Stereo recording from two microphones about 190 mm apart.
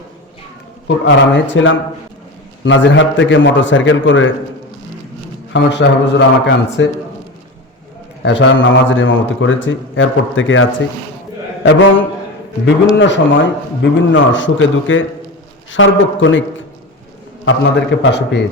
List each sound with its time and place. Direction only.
0.9 s a man's voice: 75° left (ahead or behind)
2.6 s a man's voice: 75° left (ahead or behind)
5.6 s a man's voice: 65° left (ahead or behind)
8.2 s a man's voice: 70° left (ahead or behind); by 10.7 s 90° left
11.6 s a man's voice: 70° left (ahead or behind); by 16.4 s 90° left
17.4 s a man's voice: 80° left